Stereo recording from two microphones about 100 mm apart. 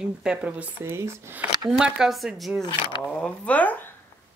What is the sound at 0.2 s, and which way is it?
Speech, 10° right (ahead or behind).